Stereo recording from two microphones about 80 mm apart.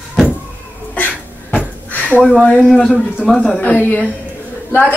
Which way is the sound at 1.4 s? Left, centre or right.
Centre.